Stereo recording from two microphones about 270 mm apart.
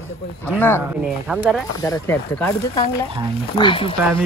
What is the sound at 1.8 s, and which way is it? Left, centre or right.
A man's voice, centre.